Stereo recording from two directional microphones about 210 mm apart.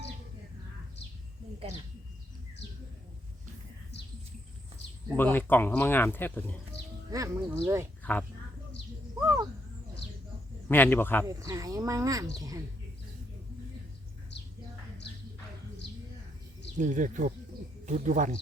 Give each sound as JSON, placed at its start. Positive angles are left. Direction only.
{"t": 3.9, "sound": "bird", "side_deg": 55}
{"t": 5.0, "sound": "speech", "side_deg": 10}
{"t": 7.1, "sound": "speech", "side_deg": -15}
{"t": 9.1, "sound": "owl", "side_deg": -15}
{"t": 10.7, "sound": "speech", "side_deg": 10}
{"t": 11.3, "sound": "speech", "side_deg": -15}
{"t": 16.7, "sound": "speech", "side_deg": -35}